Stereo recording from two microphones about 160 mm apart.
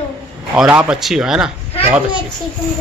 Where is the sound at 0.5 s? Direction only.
10° right (ahead or behind).